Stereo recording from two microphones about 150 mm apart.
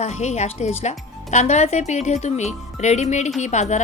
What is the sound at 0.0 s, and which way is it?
Speech, 50° left (ahead or behind).